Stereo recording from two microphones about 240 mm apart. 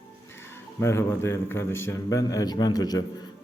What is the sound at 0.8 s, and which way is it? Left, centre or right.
Speech, centre.